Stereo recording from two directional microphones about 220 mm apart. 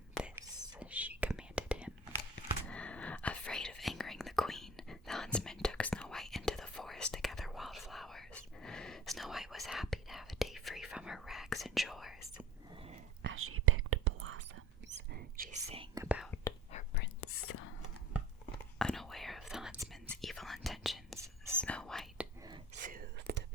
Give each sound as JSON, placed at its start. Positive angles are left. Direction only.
{"t": 0.3, "sound": "whispering", "side_deg": -15}
{"t": 12.7, "sound": "a sound", "side_deg": -25}
{"t": 13.2, "sound": "whispering", "side_deg": -70}
{"t": 15.1, "sound": "whispering", "side_deg": -35}
{"t": 16.0, "sound": "whispering", "side_deg": -5}
{"t": 16.9, "sound": "whispering", "side_deg": 50}
{"t": 17.2, "sound": "whispering", "side_deg": 85}
{"t": 18.8, "sound": "whispering", "side_deg": 0}
{"t": 21.2, "sound": "whispering", "side_deg": -15}
{"t": 21.6, "sound": "whispering", "side_deg": 5}
{"t": 22.7, "sound": "whispering", "side_deg": -40}